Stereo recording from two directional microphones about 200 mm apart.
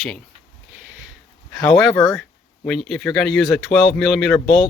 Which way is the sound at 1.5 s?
Centre (ahead or behind).